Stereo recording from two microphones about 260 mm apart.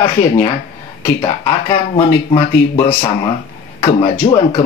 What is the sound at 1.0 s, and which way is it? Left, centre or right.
Speech, centre.